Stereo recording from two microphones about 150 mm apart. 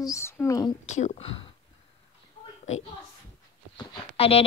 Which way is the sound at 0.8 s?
50° left (ahead or behind).